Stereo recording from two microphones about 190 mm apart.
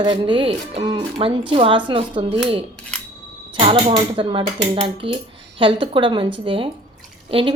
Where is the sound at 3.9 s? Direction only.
25° right (ahead or behind).